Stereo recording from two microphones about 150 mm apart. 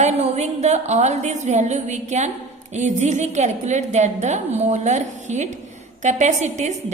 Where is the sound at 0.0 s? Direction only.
50° right (ahead or behind).